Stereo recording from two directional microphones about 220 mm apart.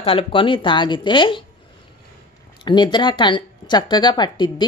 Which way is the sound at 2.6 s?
20° left (ahead or behind).